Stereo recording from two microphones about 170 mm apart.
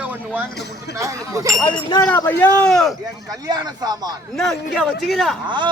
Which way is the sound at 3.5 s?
25° right (ahead or behind).